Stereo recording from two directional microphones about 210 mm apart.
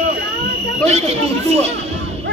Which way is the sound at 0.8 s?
30° right (ahead or behind).